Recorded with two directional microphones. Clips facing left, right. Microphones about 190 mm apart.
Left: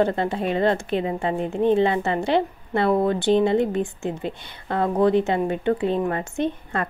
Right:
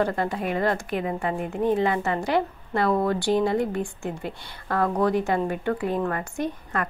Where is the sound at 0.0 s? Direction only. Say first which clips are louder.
Left 3 dB; 25° left (ahead or behind).